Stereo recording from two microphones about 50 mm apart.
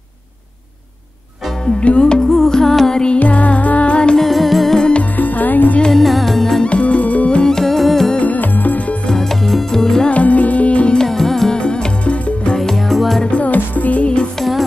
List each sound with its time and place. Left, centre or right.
1.8 s music: left
3.2 s music: left
4.2 s music: centre
4.7 s music: centre
5.1 s music: left
5.8 s music: centre
6.6 s music: left; by 8.1 s centre
8.2 s music: left
9.0 s music: centre
10.1 s music: left
11.0 s music: centre; by 12.5 s left
12.5 s music: centre
13.2 s music: left